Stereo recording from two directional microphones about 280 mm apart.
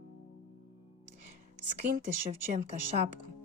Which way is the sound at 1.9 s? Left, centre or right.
Right.